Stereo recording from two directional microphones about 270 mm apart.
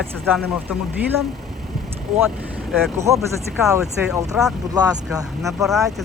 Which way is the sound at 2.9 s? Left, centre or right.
Centre.